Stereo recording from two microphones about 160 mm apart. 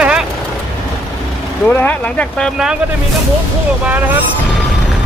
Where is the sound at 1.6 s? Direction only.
15° left (ahead or behind).